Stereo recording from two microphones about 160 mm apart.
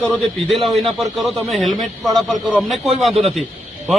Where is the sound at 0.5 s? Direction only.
35° right (ahead or behind).